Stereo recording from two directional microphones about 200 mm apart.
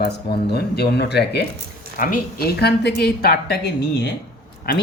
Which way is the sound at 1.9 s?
45° left (ahead or behind).